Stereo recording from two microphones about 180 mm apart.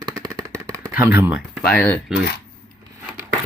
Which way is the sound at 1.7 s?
10° left (ahead or behind).